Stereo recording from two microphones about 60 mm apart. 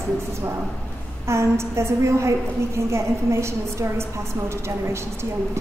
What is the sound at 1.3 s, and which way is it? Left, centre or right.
A woman's voice, right.